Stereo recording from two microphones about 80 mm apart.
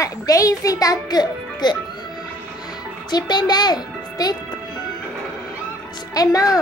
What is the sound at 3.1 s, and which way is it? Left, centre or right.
A child's voice, left.